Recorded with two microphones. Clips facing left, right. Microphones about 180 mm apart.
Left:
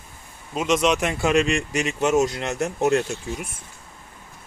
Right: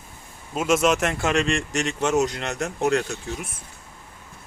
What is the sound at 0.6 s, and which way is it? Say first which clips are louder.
Speech: even; 5° right (ahead or behind).